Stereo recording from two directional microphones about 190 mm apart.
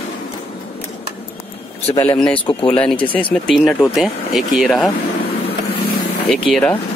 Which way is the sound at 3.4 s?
Centre (ahead or behind).